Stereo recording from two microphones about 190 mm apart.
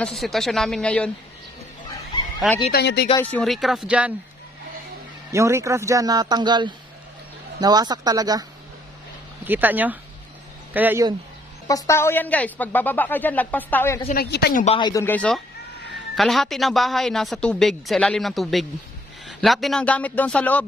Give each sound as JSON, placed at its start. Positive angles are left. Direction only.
{"t": 0.0, "sound": "speech", "side_deg": 0}
{"t": 2.4, "sound": "speech", "side_deg": 0}
{"t": 2.7, "sound": "speech", "side_deg": 60}
{"t": 3.2, "sound": "speech", "side_deg": 5}
{"t": 5.3, "sound": "speech", "side_deg": -15}
{"t": 11.6, "sound": "a man's voice", "side_deg": 20}
{"t": 14.1, "sound": "speech", "side_deg": 55}
{"t": 14.8, "sound": "speech", "side_deg": 20}
{"t": 15.0, "sound": "a man's voice", "side_deg": 5}